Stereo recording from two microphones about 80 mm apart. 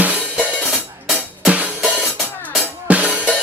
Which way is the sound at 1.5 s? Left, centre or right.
Centre.